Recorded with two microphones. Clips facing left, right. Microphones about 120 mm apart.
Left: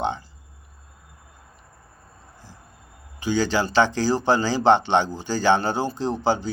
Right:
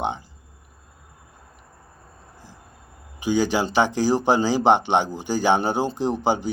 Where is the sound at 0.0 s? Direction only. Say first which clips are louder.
Left 1 dB; 15° right (ahead or behind).